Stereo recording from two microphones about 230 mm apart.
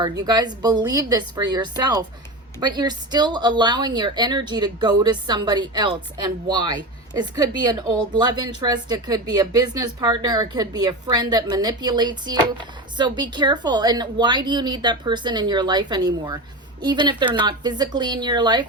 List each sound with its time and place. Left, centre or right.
0.0 s speech: centre